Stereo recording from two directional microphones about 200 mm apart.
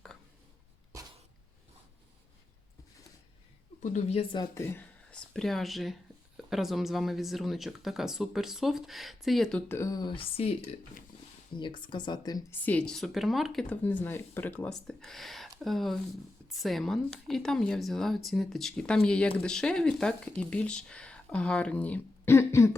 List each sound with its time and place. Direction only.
3.8 s speech: 35° left (ahead or behind)
4.5 s speech: 10° left (ahead or behind)